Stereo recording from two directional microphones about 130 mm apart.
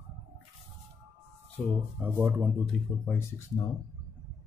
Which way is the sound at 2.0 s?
15° right (ahead or behind).